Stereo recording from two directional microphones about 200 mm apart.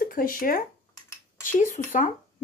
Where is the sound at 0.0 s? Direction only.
45° left (ahead or behind).